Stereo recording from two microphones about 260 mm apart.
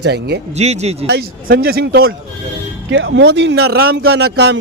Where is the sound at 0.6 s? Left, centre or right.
Right.